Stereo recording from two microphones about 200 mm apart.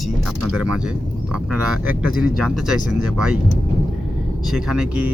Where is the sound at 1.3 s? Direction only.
5° right (ahead or behind).